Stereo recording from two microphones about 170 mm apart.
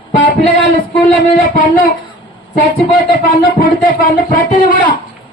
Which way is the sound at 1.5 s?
55° left (ahead or behind).